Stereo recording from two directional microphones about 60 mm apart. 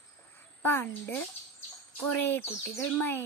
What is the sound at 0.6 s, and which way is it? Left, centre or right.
Speech, left.